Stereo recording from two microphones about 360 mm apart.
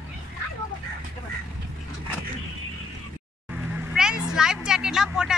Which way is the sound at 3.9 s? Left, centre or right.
Centre.